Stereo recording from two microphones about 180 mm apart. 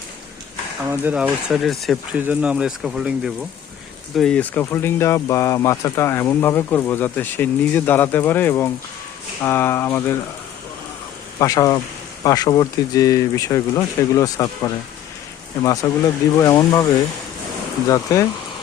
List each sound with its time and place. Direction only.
0.9 s speech: 10° right (ahead or behind); by 10.2 s 15° left (ahead or behind)
11.3 s speech: 20° left (ahead or behind)
17.8 s speech: 20° left (ahead or behind)